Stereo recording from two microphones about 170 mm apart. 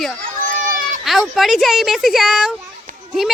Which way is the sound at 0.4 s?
50° right (ahead or behind).